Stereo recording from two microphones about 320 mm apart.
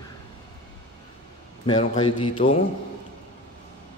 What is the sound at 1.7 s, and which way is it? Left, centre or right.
Speech, centre.